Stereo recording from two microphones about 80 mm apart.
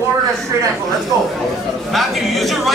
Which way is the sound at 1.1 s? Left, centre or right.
Right.